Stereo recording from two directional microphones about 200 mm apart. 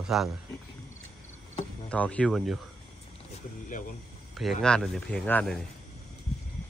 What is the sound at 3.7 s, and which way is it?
Speech, 40° left (ahead or behind).